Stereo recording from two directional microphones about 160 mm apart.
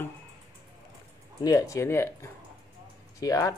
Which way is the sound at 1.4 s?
20° left (ahead or behind).